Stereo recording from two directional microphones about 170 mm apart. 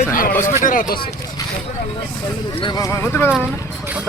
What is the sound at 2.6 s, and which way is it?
Speech, 20° left (ahead or behind).